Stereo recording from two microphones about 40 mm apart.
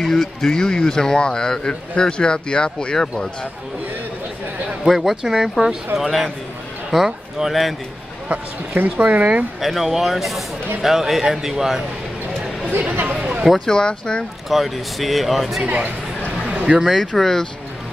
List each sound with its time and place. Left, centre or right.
0.1 s speech: centre
4.8 s speech: centre
5.2 s a man's voice: centre
5.9 s speech: centre
8.7 s speech: right
9.6 s a man's voice: centre
12.9 s speech: right
13.7 s speech: left
14.5 s speech: centre
16.6 s speech: right
17.2 s speech: centre